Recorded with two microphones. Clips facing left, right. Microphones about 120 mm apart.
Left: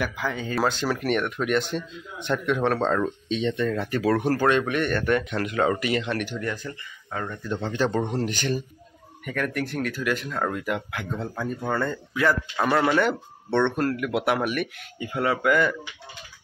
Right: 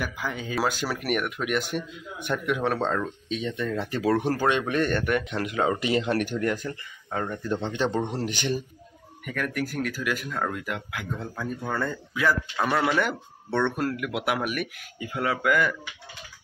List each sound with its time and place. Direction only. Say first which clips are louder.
0.0 s speech: left 3 dB; 5° right (ahead or behind)
4.6 s speech: even; 30° right (ahead or behind)
5.0 s speech: left 2 dB; 10° right (ahead or behind)
5.8 s speech: right 2 dB; 25° right (ahead or behind); by 6.6 s 45° right (ahead or behind)
7.2 s speech: even; 15° right (ahead or behind)
9.2 s speech: left 2 dB; 5° right (ahead or behind)